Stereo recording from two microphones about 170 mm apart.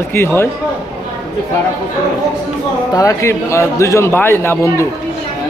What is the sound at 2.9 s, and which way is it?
A man's voice, 20° left (ahead or behind).